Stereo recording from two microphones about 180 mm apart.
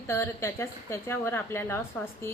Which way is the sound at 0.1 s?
15° left (ahead or behind).